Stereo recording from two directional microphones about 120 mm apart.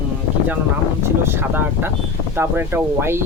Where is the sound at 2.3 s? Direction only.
20° right (ahead or behind).